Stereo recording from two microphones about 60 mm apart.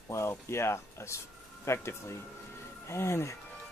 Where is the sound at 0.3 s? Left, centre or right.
Left.